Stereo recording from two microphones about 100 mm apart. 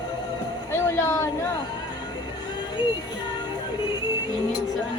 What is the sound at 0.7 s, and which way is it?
Music, 25° left (ahead or behind).